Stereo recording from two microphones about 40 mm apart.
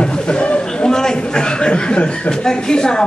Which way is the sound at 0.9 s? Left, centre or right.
Centre.